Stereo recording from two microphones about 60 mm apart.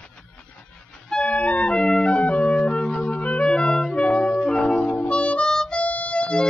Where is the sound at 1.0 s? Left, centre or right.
Centre.